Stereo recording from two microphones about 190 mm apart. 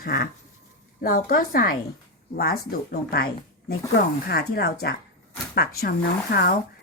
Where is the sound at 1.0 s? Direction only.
50° left (ahead or behind).